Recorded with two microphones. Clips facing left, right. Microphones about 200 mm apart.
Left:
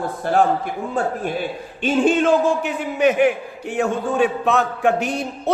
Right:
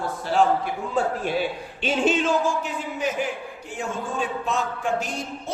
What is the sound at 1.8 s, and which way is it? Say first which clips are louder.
A man's voice: left 5 dB; 50° left (ahead or behind).